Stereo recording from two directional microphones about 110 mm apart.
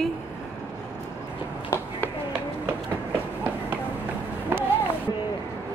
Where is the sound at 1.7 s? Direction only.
25° left (ahead or behind).